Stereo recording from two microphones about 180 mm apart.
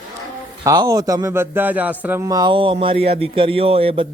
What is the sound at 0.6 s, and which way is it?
Speech, 20° right (ahead or behind).